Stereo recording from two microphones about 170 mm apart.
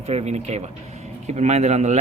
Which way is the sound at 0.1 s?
40° right (ahead or behind).